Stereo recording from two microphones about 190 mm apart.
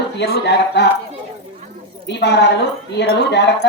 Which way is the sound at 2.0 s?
65° left (ahead or behind).